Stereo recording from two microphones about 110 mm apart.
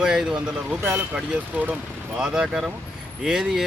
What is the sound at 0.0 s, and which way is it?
Speech, 5° right (ahead or behind).